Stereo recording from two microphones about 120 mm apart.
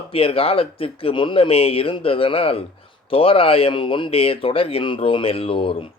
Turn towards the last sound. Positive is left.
turn(degrees=50)  # may be behind; listen again after turning